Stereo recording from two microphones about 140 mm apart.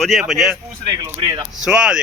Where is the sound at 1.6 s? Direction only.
5° right (ahead or behind).